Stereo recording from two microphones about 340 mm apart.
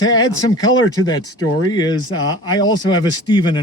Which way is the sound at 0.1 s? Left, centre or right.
Centre.